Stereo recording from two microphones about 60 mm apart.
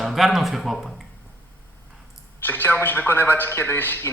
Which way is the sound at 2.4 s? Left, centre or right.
Left.